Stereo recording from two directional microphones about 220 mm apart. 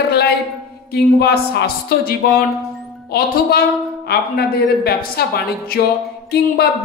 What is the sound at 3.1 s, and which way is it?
A woman's voice, 45° left (ahead or behind).